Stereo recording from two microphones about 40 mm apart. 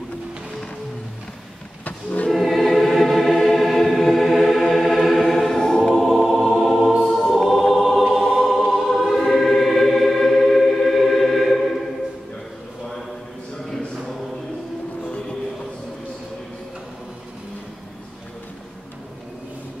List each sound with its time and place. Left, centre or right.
1.9 s music: left
2.3 s choir: centre
4.6 s music: centre
5.6 s choir: centre
6.0 s music: centre
7.1 s choir: centre
8.2 s choir: centre
8.5 s choir: centre
15.0 s train: left